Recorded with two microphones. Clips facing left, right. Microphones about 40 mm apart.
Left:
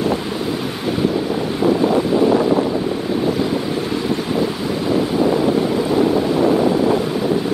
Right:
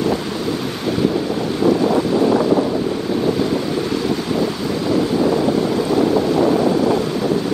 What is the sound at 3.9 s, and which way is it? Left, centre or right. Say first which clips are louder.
Wind: even; centre.